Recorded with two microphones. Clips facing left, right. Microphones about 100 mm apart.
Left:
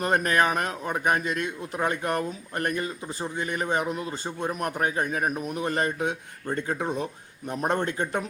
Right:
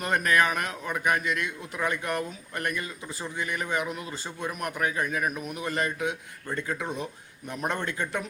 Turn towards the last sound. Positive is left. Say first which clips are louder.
# left 4 dB
turn(degrees=40)  # may be behind; listen again after turning